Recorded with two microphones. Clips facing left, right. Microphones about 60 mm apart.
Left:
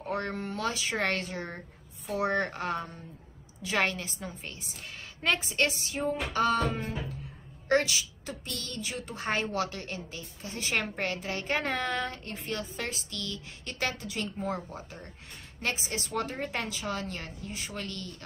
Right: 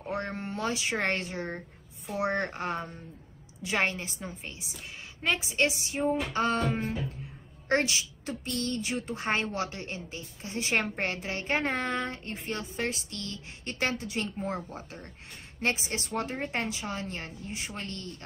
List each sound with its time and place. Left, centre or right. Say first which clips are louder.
0.1 s a woman's voice: left 1 dB; right
5.9 s a woman's voice: right 3 dB; right
7.6 s a woman's voice: left 1 dB; right
15.9 s a woman's voice: even; right